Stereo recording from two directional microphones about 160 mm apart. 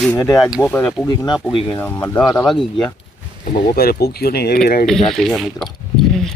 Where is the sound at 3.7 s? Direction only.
75° left (ahead or behind).